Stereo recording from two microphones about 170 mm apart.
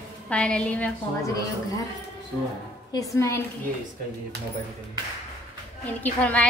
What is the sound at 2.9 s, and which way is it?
Speech, 20° left (ahead or behind).